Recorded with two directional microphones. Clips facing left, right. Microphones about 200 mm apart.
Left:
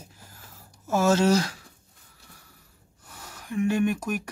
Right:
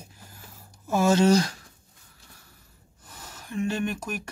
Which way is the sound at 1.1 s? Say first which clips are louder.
Right 4 dB; 5° left (ahead or behind).